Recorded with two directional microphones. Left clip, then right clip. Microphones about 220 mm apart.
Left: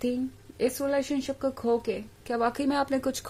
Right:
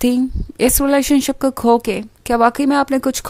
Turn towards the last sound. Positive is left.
turn(degrees=-35)  # may be behind; listen again after turning